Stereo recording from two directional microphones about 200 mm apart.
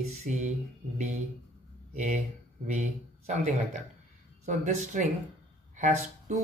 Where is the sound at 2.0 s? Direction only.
35° right (ahead or behind).